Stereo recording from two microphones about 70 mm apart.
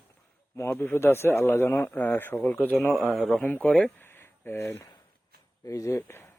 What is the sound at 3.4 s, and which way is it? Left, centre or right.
Speech, centre.